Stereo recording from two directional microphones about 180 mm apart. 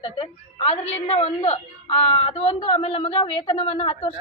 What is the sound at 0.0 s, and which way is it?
A woman's voice, 30° left (ahead or behind).